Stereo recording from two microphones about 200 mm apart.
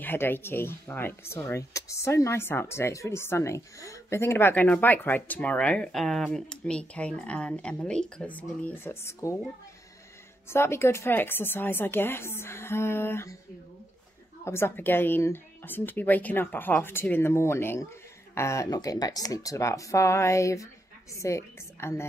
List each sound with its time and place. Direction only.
0.0 s speech: 10° left (ahead or behind)
10.5 s speech: 10° left (ahead or behind)
14.4 s a woman's voice: 10° left (ahead or behind)